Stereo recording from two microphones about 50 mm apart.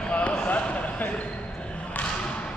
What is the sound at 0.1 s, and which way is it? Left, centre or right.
Basketball bounce, left.